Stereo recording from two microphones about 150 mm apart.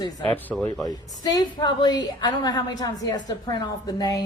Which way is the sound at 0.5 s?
Centre (ahead or behind).